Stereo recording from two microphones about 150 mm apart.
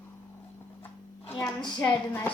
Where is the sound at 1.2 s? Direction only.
20° left (ahead or behind).